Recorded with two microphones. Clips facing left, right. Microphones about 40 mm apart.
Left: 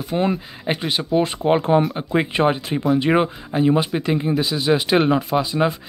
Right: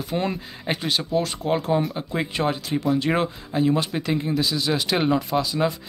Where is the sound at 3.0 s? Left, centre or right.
Centre.